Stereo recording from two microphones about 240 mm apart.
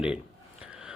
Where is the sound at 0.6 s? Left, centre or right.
Centre.